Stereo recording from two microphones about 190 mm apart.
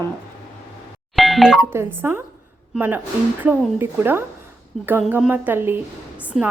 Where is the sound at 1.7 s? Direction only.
10° right (ahead or behind).